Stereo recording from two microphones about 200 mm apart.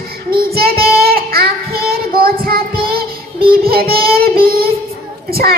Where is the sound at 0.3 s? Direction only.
50° right (ahead or behind).